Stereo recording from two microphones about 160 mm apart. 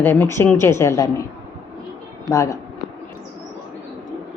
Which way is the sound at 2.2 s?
20° left (ahead or behind).